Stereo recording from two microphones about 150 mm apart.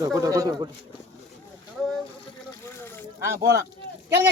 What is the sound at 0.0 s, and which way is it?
Speech, 25° right (ahead or behind).